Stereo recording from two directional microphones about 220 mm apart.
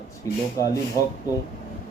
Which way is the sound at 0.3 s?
15° left (ahead or behind).